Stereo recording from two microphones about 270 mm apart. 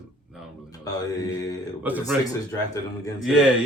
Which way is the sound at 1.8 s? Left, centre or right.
Centre.